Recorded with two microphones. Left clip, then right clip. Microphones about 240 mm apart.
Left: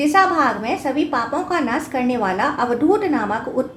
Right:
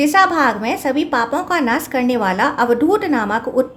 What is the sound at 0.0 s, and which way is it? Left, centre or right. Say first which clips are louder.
A woman's voice: right 2 dB; right.